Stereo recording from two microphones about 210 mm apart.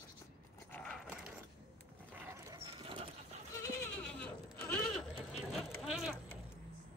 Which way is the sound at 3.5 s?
15° left (ahead or behind).